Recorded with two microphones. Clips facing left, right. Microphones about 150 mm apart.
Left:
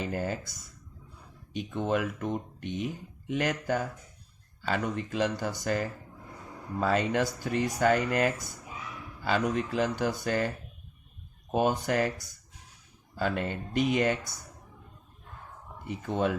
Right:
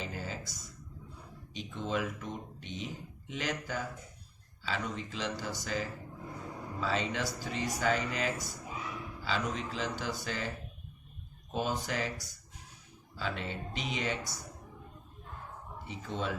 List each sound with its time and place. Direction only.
0.0 s speech: 55° left (ahead or behind)
11.5 s speech: 55° left (ahead or behind)
15.9 s speech: 55° left (ahead or behind)